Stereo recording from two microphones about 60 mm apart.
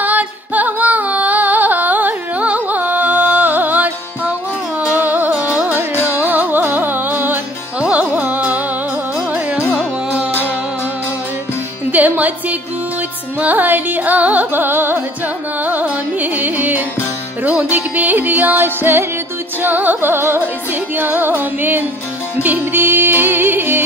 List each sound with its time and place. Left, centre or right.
0.0 s music: right
5.0 s music: right
11.9 s music: right